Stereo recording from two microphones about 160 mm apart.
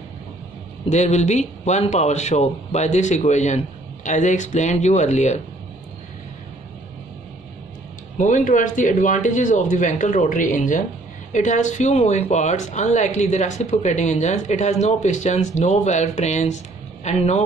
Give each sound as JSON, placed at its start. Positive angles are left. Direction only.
{"t": 0.8, "sound": "speech", "side_deg": 45}
{"t": 8.2, "sound": "speech", "side_deg": 50}